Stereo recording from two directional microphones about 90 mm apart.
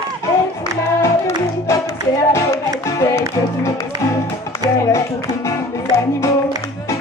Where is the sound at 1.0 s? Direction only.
35° left (ahead or behind).